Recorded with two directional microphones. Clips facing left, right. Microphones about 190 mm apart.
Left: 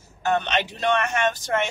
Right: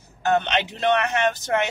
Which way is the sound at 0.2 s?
20° right (ahead or behind).